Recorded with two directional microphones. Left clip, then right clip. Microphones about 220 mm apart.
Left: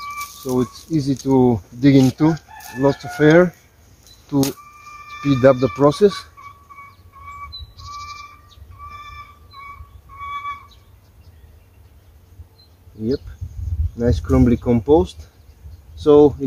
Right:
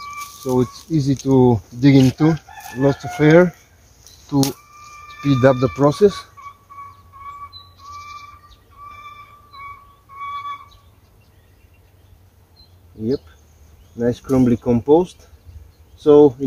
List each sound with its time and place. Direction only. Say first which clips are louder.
0.5 s speech: right 2 dB; 20° right (ahead or behind)
2.8 s chicken: left 1 dB; 15° right (ahead or behind)
4.3 s speech: even; 10° right (ahead or behind)
13.9 s speech: even; 5° right (ahead or behind)